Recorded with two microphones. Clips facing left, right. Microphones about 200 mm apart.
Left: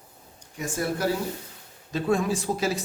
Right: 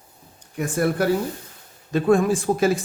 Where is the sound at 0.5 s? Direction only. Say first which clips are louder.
Right 7 dB; 60° right (ahead or behind).